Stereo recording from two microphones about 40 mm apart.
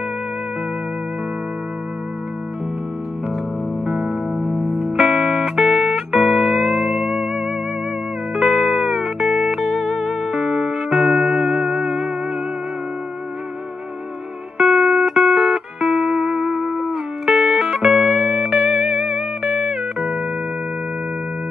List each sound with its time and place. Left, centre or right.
3.8 s music: right
4.9 s music: centre
10.0 s music: centre
14.6 s music: right
15.0 s music: centre
17.3 s music: centre